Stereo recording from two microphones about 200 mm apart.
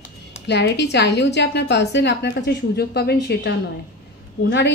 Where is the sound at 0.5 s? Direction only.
60° left (ahead or behind).